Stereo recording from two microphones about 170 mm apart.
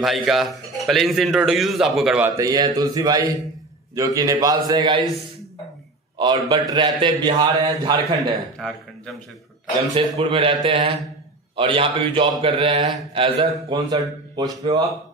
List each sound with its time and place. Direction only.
0.0 s a man's voice: centre (ahead or behind); by 5.0 s 25° right (ahead or behind)
6.1 s a man's voice: 25° right (ahead or behind)
8.5 s a man's voice: 5° left (ahead or behind)
9.9 s a man's voice: 30° right (ahead or behind)